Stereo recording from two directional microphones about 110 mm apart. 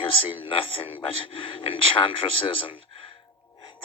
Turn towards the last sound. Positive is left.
turn(degrees=50)  # may be behind; listen again after turning